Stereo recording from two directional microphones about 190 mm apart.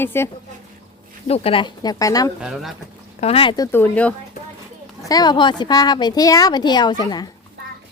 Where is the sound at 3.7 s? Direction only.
10° left (ahead or behind).